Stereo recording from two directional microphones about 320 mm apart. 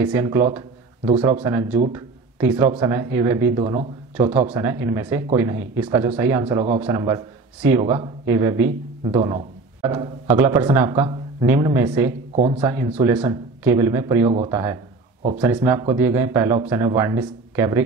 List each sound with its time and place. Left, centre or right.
0.0 s speech: centre
1.4 s a man's voice: centre
13.0 s a man's voice: centre